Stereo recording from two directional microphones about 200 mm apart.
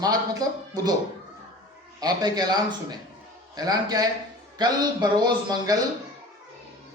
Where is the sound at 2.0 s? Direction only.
20° right (ahead or behind).